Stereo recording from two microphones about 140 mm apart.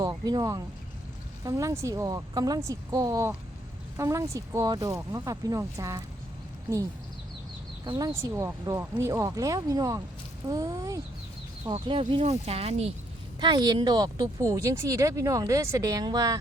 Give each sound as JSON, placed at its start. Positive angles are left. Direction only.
{"t": 0.0, "sound": "speech", "side_deg": -30}
{"t": 7.9, "sound": "speech", "side_deg": -25}
{"t": 11.7, "sound": "speech", "side_deg": -40}
{"t": 13.4, "sound": "speech", "side_deg": -30}